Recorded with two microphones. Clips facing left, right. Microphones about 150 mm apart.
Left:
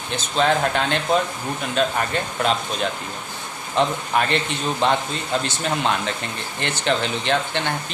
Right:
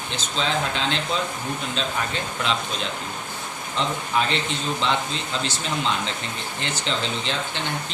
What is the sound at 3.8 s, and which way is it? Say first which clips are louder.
Speech: left 4 dB; 60° left (ahead or behind).